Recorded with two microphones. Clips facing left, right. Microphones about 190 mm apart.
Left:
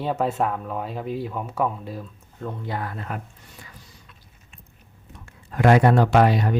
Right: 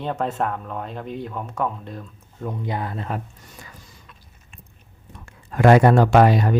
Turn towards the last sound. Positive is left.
turn(degrees=-45)  # may be behind; listen again after turning